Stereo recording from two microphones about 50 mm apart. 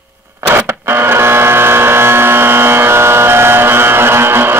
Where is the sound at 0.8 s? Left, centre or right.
Right.